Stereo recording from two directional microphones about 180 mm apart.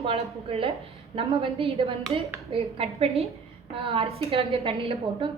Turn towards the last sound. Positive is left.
turn(degrees=-30)  # may be behind; listen again after turning